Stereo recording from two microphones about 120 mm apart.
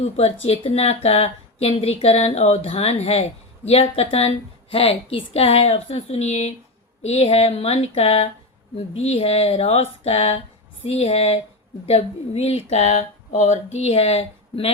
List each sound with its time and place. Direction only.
0.0 s a woman's voice: 55° left (ahead or behind)